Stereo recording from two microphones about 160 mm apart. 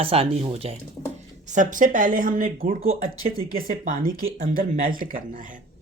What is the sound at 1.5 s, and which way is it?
Speech, 55° right (ahead or behind).